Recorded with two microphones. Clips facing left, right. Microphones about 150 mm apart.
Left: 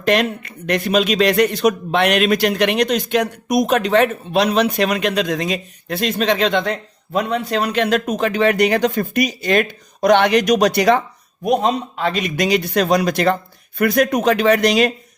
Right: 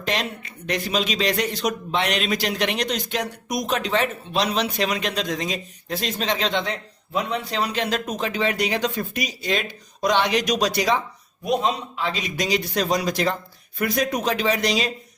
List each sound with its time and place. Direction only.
0.0 s speech: 60° left (ahead or behind)